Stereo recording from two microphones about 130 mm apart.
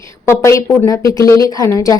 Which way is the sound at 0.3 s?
20° left (ahead or behind).